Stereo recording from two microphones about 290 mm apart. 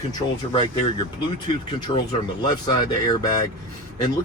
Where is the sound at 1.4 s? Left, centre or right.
Centre.